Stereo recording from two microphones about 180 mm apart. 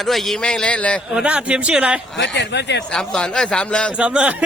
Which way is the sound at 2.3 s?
70° left (ahead or behind).